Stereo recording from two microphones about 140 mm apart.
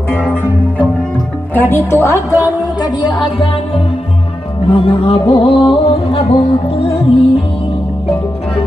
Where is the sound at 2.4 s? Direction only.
30° left (ahead or behind).